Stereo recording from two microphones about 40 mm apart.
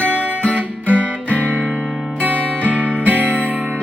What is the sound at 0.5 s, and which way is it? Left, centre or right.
Music, right.